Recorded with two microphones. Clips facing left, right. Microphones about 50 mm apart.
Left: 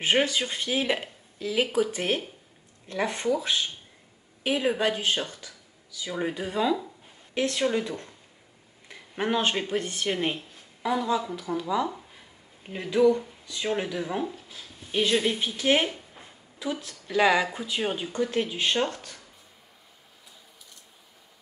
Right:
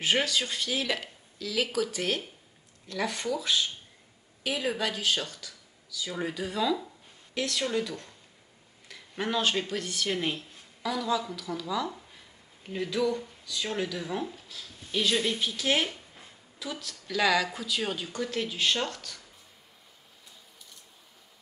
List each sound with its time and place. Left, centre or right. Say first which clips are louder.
0.0 s speech: left 3 dB; left
15.9 s a sound: left 4 dB; centre
17.5 s speech: left 3 dB; left